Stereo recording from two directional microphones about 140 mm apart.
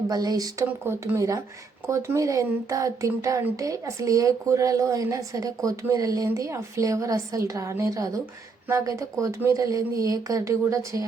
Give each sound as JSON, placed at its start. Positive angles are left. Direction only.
{"t": 0.1, "sound": "speech", "side_deg": -25}